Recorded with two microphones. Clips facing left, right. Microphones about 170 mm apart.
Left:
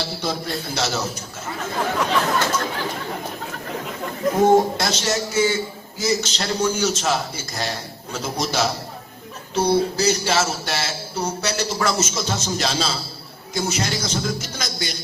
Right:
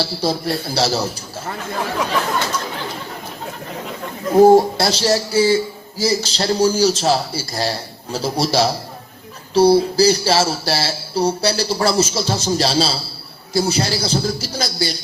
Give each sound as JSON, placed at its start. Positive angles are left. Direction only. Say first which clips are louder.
{"t": 0.0, "sound": "a man's voice", "louder": "right 5 dB", "side_deg": -35}
{"t": 4.4, "sound": "a man's voice", "louder": "right 6 dB", "side_deg": -35}